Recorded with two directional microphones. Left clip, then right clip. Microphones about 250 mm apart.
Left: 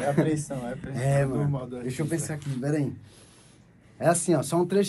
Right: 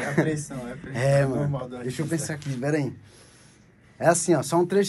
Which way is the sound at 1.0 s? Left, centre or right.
Right.